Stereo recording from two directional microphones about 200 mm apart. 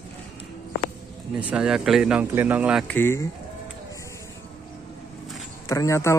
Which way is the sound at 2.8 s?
10° left (ahead or behind).